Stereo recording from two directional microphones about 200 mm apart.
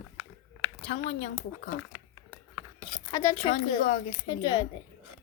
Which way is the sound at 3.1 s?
15° left (ahead or behind).